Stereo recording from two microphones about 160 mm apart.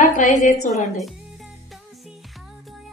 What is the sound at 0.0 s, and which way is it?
Speech, 55° left (ahead or behind).